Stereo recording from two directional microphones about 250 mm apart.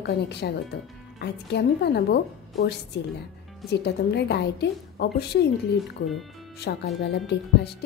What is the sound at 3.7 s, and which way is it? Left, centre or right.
A woman's voice, left.